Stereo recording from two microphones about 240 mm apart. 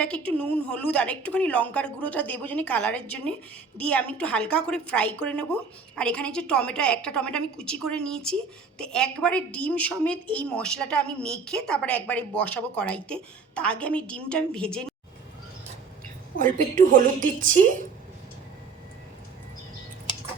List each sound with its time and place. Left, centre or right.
0.0 s a woman's voice: centre
16.4 s a woman's voice: right